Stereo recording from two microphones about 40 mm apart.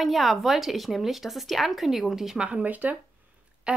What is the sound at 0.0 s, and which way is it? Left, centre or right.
A woman's voice, centre.